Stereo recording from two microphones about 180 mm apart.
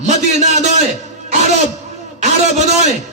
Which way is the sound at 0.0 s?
40° right (ahead or behind).